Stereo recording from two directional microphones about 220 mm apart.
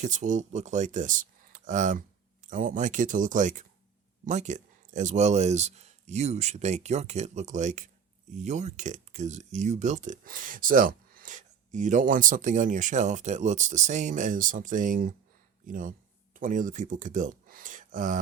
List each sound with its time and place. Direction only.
0.0 s speech: 35° right (ahead or behind)